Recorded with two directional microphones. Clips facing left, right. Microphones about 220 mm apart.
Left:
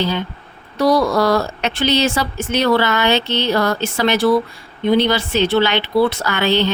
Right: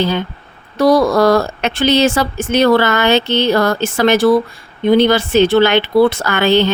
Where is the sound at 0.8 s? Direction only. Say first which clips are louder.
Right 4 dB; 45° right (ahead or behind).